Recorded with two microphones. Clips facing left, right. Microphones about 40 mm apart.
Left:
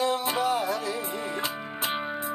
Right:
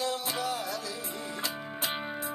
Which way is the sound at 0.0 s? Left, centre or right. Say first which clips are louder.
Left 6 dB; left.